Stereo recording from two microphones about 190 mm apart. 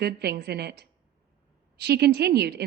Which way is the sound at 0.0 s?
55° right (ahead or behind).